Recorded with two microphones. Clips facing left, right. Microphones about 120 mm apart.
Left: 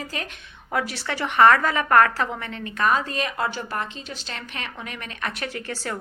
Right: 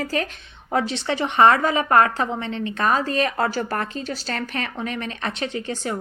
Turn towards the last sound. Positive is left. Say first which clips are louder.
# right 4 dB
turn(degrees=-20)  # may be behind; listen again after turning